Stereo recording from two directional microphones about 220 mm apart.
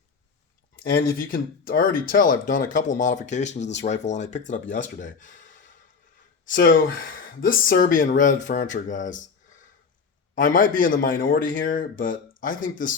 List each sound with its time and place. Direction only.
0.8 s speech: 40° left (ahead or behind)
6.4 s speech: 40° left (ahead or behind)
10.3 s speech: 40° left (ahead or behind)